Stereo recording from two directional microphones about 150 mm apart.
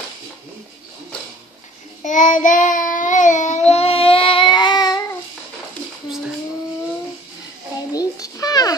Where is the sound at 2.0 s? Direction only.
55° left (ahead or behind); by 5.1 s 25° left (ahead or behind).